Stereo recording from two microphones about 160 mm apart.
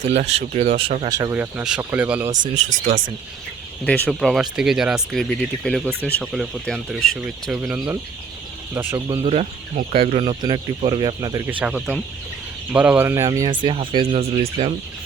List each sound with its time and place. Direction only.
0.2 s speech: 40° right (ahead or behind)
1.1 s speech: 20° right (ahead or behind)
2.3 s speech: 55° right (ahead or behind)
3.8 s speech: 10° left (ahead or behind); by 9.0 s 15° right (ahead or behind)
9.2 s speech: 40° right (ahead or behind); by 11.5 s 20° right (ahead or behind)
11.6 s speech: 10° right (ahead or behind); by 14.7 s 40° right (ahead or behind)